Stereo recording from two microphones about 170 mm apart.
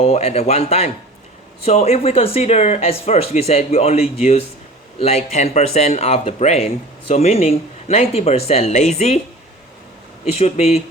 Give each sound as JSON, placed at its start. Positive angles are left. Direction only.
{"t": 0.0, "sound": "speech", "side_deg": 40}
{"t": 10.3, "sound": "speech", "side_deg": 40}